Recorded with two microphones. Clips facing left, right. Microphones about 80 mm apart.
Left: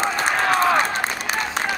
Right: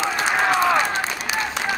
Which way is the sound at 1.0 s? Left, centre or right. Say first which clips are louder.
Even; left.